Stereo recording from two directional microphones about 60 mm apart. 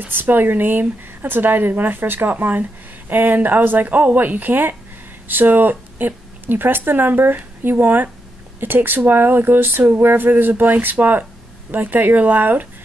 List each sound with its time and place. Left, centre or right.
0.0 s speech: right